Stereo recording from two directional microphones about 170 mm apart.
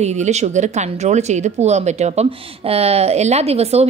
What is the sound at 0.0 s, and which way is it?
Speech, 40° right (ahead or behind).